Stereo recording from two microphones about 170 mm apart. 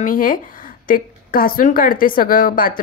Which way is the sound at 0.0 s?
55° left (ahead or behind).